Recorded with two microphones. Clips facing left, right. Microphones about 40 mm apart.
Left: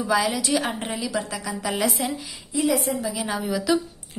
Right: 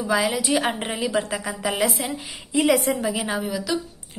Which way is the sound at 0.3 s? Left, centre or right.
Right.